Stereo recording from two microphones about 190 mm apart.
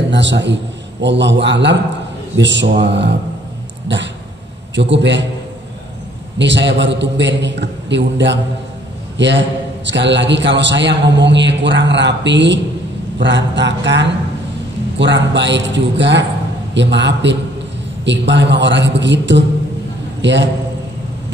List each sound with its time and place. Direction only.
0.1 s a man's voice: 70° right (ahead or behind)
6.3 s a man's voice: 70° right (ahead or behind)